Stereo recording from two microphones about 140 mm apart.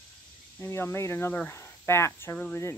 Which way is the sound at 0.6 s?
20° left (ahead or behind).